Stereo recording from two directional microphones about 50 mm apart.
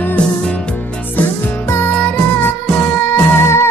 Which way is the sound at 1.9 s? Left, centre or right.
Left.